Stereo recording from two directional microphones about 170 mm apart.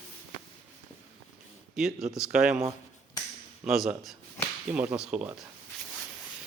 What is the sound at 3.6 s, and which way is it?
A man's voice, centre (ahead or behind).